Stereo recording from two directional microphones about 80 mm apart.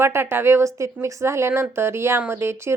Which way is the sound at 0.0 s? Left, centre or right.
Right.